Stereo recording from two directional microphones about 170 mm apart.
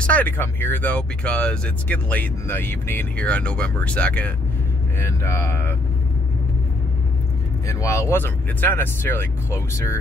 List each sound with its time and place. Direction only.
0.0 s speech: 10° left (ahead or behind)
7.6 s speech: 20° left (ahead or behind)